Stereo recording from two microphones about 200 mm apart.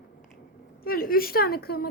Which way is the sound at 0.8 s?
45° left (ahead or behind).